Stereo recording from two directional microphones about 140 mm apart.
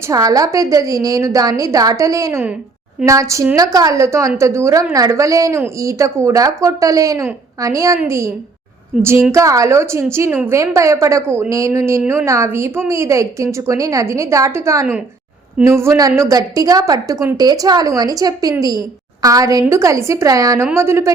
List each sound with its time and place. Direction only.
0.1 s a woman's voice: 25° right (ahead or behind)